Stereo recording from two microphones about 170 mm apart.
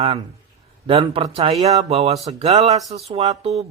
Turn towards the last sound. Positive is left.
turn(degrees=-40)  # may be behind; listen again after turning